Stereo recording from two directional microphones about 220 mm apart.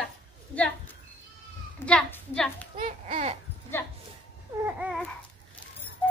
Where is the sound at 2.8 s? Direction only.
30° right (ahead or behind).